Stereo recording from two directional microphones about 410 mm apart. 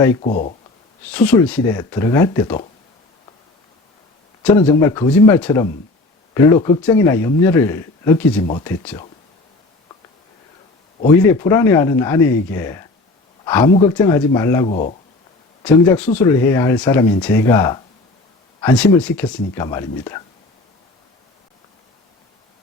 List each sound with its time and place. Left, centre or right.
0.0 s speech: centre
0.3 s speech: centre
1.1 s speech: centre
4.4 s speech: centre
11.3 s speech: centre
15.6 s speech: centre